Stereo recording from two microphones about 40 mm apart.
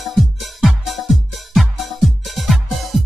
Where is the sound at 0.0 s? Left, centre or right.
Centre.